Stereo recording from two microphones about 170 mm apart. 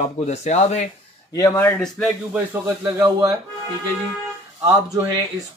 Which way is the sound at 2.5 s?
15° right (ahead or behind).